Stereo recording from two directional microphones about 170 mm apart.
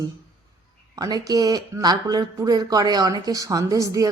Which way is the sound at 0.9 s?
20° right (ahead or behind).